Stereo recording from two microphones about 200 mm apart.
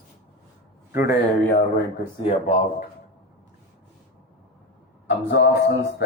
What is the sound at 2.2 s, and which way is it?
Speech, 35° left (ahead or behind).